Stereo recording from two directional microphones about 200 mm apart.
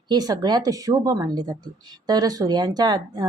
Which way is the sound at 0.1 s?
20° right (ahead or behind).